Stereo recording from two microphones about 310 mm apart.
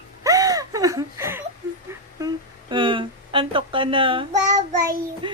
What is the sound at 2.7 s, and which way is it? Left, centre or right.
Snicker, centre.